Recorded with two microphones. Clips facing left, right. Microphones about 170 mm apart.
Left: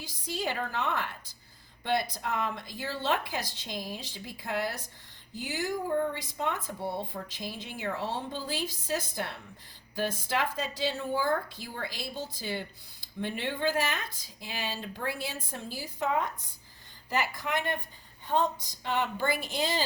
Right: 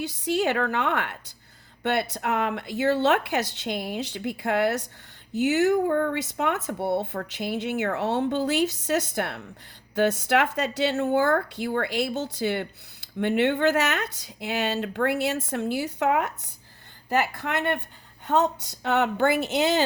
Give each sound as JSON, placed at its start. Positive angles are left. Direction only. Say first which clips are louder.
{"t": 0.0, "sound": "speech", "louder": "right 10 dB", "side_deg": -70}
{"t": 17.1, "sound": "speech", "louder": "right 5 dB", "side_deg": -65}